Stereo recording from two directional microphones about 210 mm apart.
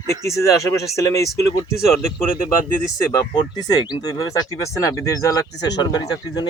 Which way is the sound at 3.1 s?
20° left (ahead or behind).